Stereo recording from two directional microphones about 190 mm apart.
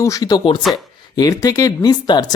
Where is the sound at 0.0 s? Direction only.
20° left (ahead or behind).